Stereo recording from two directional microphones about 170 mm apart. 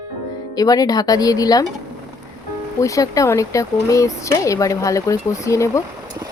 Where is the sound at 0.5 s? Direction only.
20° left (ahead or behind).